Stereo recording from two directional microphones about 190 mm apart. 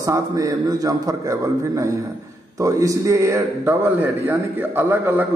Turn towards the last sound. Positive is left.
turn(degrees=-10)  # may be behind; listen again after turning